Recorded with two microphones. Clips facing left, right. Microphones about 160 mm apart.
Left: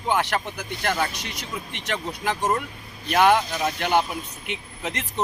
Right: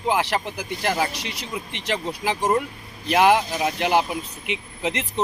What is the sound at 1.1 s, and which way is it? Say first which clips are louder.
Speech: right 2 dB; 30° right (ahead or behind).